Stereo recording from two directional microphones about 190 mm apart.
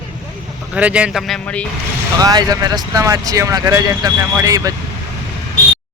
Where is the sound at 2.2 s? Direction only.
20° right (ahead or behind).